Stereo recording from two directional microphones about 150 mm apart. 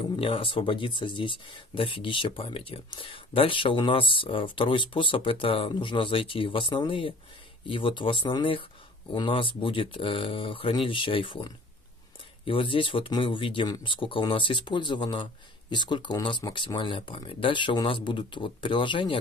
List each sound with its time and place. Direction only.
0.0 s speech: 35° left (ahead or behind)